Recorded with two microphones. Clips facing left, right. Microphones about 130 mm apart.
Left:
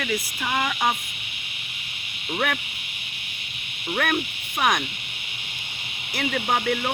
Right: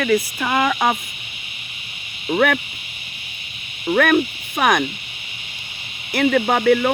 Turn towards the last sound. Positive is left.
turn(degrees=-90)